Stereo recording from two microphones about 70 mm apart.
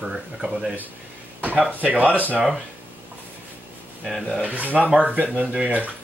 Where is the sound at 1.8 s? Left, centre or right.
Right.